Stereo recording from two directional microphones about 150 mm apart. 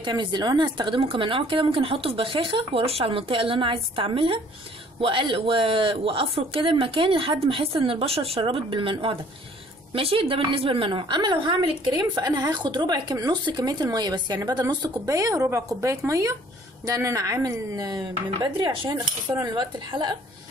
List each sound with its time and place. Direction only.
0.0 s a woman's voice: 30° right (ahead or behind)